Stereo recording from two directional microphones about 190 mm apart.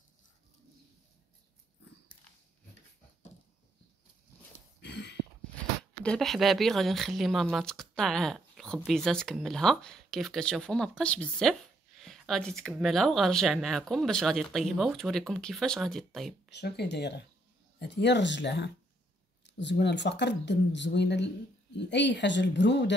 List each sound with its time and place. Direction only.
4.8 s a sound: 65° left (ahead or behind)
6.0 s speech: centre (ahead or behind)
16.4 s a woman's voice: 60° left (ahead or behind)